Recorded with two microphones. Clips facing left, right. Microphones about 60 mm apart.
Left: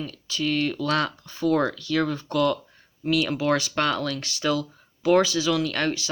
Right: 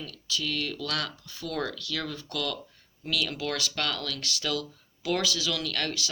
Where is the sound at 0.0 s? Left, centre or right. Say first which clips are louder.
Left 6 dB; left.